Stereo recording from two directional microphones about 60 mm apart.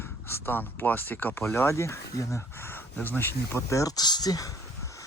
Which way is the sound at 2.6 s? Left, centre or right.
Left.